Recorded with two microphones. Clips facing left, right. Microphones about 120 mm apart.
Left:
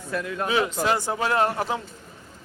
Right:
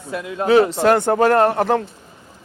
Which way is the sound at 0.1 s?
20° right (ahead or behind).